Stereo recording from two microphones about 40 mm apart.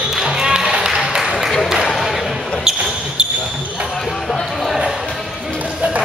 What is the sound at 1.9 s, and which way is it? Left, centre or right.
Basketball bounce, centre.